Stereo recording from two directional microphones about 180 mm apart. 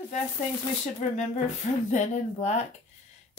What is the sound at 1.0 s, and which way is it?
Speech, 40° left (ahead or behind).